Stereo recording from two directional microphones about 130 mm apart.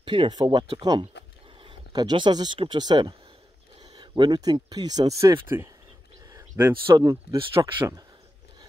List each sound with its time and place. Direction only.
0.0 s speech: 40° right (ahead or behind); by 5.7 s 20° right (ahead or behind)
6.3 s a sound: 15° right (ahead or behind)
6.9 s speech: 25° right (ahead or behind)
7.3 s speech: 40° right (ahead or behind)